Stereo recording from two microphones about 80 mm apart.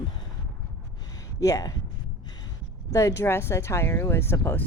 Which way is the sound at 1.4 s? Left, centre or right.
Left.